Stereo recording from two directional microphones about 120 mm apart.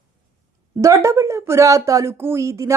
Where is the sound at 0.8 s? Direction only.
25° right (ahead or behind).